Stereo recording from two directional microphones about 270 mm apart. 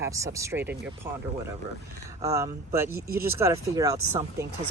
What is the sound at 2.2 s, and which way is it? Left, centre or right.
Speech, centre.